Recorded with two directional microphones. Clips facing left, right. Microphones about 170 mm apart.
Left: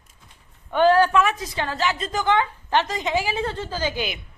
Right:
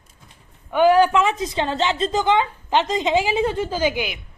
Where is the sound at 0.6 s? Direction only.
10° right (ahead or behind).